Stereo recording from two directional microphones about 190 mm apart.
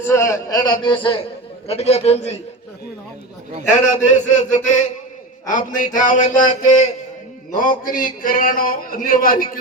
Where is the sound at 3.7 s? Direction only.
40° left (ahead or behind).